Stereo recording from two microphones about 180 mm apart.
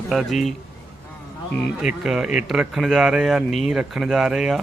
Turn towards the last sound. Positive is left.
turn(degrees=-5)  # may be behind; listen again after turning